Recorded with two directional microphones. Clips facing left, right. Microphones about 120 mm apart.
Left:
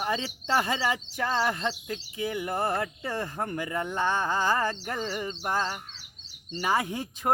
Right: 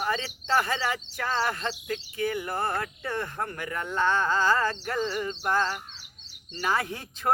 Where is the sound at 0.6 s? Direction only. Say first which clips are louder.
Left 1 dB; 15° left (ahead or behind).